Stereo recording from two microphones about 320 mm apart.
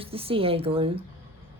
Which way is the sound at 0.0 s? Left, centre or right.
Centre.